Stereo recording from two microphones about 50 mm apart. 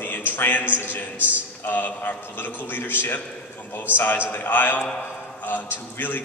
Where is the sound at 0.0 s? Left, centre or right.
Left.